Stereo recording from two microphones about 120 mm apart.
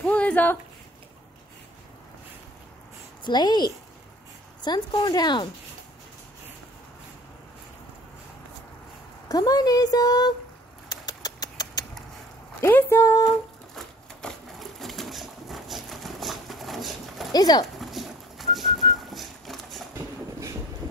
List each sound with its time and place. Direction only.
0.0 s a sound: 10° left (ahead or behind)
3.3 s speech: 35° left (ahead or behind)
9.3 s speech: 30° left (ahead or behind)
10.9 s a sound: 35° left (ahead or behind)
12.6 s speech: 20° left (ahead or behind)
13.7 s sewing machine: centre (ahead or behind)
17.3 s speech: 35° left (ahead or behind)
17.7 s dog: centre (ahead or behind)
18.9 s a sound: centre (ahead or behind)